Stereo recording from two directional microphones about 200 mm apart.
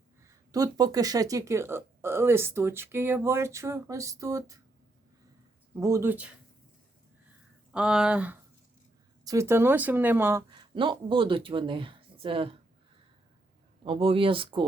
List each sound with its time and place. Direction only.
0.3 s speech: 20° right (ahead or behind)
5.7 s speech: 15° right (ahead or behind)
7.7 s speech: 5° right (ahead or behind)
10.5 s speech: 25° right (ahead or behind)
13.8 s speech: 25° right (ahead or behind)